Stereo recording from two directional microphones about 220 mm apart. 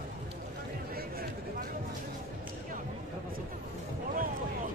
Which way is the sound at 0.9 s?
45° right (ahead or behind).